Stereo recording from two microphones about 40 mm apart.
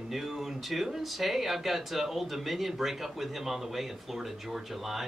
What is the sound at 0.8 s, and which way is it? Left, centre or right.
A man's voice, centre.